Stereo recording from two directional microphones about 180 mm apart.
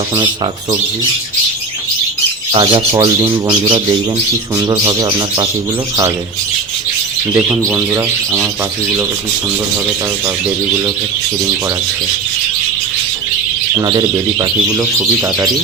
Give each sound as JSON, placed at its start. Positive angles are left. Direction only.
{"t": 2.6, "sound": "speech", "side_deg": -30}
{"t": 3.3, "sound": "speech", "side_deg": -15}
{"t": 7.3, "sound": "speech", "side_deg": -5}
{"t": 13.8, "sound": "speech", "side_deg": -20}